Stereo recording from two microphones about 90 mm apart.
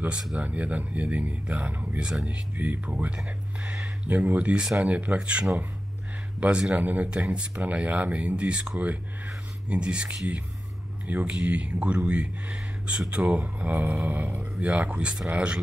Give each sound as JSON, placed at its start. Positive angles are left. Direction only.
{"t": 0.4, "sound": "speech", "side_deg": -15}